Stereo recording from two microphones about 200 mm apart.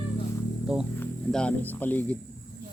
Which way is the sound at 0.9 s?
5° left (ahead or behind).